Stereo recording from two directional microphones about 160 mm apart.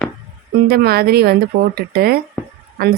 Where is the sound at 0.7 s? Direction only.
75° right (ahead or behind).